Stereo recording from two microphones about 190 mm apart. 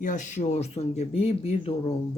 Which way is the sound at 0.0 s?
40° left (ahead or behind).